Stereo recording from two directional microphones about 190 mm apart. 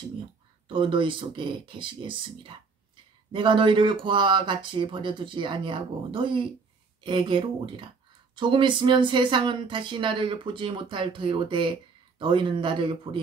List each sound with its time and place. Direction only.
0.7 s speech: 25° right (ahead or behind)